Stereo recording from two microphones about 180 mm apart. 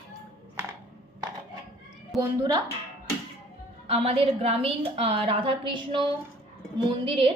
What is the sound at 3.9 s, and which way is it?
A woman's voice, 35° right (ahead or behind).